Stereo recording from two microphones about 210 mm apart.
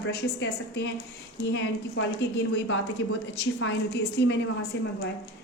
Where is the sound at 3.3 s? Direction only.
55° left (ahead or behind).